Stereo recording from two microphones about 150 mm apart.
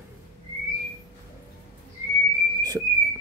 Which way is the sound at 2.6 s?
25° right (ahead or behind).